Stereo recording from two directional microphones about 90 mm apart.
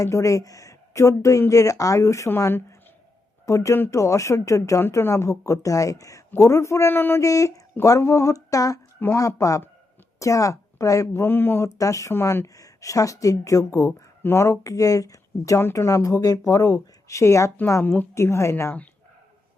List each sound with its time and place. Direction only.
0.0 s a woman's voice: 35° left (ahead or behind)
3.4 s a woman's voice: 35° left (ahead or behind)
7.2 s a woman's voice: 35° left (ahead or behind)
11.1 s a man's voice: 25° left (ahead or behind)
11.6 s a woman's voice: 35° left (ahead or behind)
17.8 s a man's voice: 20° left (ahead or behind)
18.1 s a woman's voice: 30° left (ahead or behind)